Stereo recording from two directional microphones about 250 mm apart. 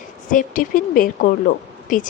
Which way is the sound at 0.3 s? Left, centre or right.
Left.